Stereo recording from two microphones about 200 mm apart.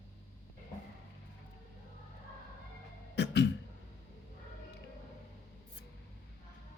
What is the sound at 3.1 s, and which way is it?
Cough, 55° left (ahead or behind).